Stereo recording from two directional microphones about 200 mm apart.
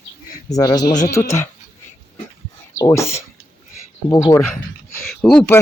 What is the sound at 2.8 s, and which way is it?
Speech, 15° left (ahead or behind).